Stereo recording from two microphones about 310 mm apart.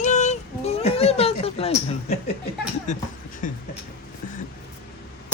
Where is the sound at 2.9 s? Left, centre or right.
Left.